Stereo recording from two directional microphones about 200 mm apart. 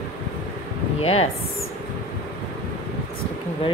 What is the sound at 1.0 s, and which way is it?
Speech, 30° left (ahead or behind).